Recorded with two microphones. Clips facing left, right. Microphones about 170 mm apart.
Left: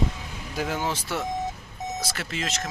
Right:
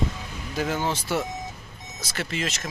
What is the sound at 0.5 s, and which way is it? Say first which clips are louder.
Speech: right 2 dB; 5° left (ahead or behind).